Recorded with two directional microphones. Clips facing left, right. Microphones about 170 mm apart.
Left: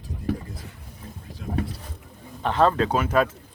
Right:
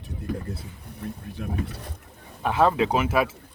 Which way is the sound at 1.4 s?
65° right (ahead or behind).